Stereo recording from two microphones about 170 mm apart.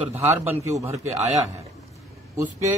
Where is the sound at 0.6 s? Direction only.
15° right (ahead or behind).